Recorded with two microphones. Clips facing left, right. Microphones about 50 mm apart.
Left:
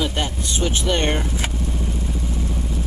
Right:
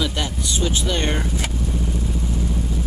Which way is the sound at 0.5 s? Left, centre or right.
Left.